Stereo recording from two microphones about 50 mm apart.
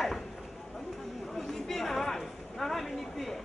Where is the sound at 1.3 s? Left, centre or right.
Centre.